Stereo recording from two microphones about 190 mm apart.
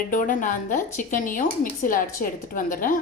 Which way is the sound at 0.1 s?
45° left (ahead or behind).